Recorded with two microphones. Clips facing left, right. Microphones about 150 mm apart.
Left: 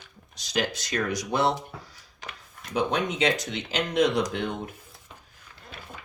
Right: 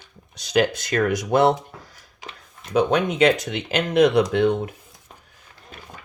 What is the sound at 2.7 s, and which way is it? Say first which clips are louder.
Speech: right 7 dB; 70° right (ahead or behind).